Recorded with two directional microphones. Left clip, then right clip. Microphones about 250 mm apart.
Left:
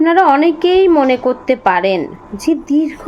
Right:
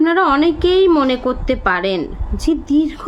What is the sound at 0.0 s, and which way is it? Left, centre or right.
A woman's voice, centre.